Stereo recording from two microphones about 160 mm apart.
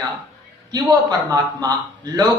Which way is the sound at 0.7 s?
25° right (ahead or behind).